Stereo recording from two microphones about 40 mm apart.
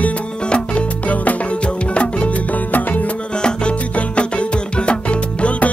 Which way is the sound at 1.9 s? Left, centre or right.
Left.